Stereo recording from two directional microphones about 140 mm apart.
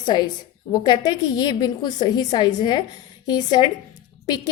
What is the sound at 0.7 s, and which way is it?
A woman's voice, 30° left (ahead or behind).